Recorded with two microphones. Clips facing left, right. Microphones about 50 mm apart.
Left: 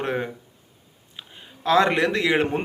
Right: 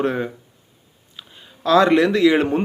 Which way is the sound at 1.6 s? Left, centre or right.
Left.